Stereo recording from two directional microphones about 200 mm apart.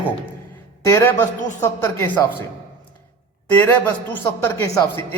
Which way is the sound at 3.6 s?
10° left (ahead or behind).